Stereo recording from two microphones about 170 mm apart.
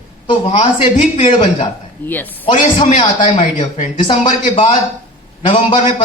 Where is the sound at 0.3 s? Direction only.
30° left (ahead or behind).